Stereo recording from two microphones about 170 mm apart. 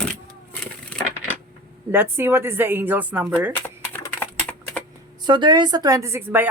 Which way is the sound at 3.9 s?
10° left (ahead or behind).